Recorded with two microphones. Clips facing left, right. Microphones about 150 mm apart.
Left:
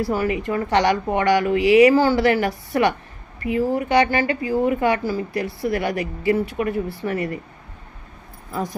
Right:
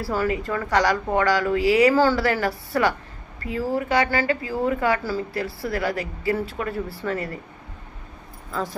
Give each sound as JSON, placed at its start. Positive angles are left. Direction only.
{"t": 0.0, "sound": "a woman's voice", "side_deg": 15}